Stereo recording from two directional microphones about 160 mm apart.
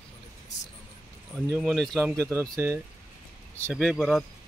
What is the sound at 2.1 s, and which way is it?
Speech, 15° right (ahead or behind).